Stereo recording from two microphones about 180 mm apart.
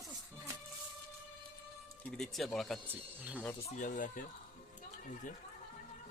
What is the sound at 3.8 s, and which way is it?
Speech, 45° left (ahead or behind).